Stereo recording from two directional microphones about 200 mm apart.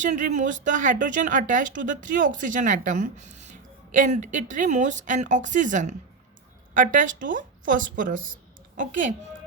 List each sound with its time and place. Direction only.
0.0 s a child's voice: 35° right (ahead or behind)